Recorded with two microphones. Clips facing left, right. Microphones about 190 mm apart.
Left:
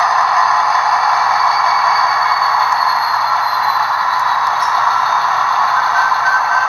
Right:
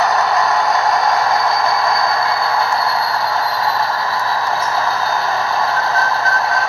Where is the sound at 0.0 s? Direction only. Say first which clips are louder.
Right 1 dB; 35° right (ahead or behind).